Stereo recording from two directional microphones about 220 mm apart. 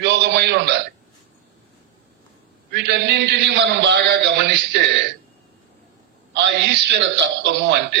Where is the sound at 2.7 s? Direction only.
50° right (ahead or behind).